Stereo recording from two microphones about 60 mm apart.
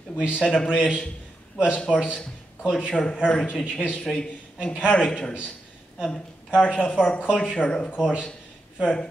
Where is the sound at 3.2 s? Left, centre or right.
Left.